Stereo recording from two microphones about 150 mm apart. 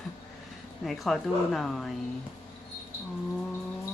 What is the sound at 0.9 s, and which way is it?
Speech, centre (ahead or behind).